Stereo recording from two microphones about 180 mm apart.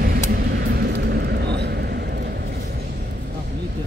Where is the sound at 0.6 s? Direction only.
65° right (ahead or behind).